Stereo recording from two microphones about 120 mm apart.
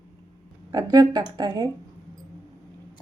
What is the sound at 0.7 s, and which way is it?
Speech, 35° right (ahead or behind).